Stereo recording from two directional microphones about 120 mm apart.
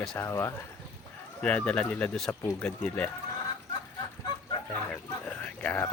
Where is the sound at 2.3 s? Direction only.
20° left (ahead or behind).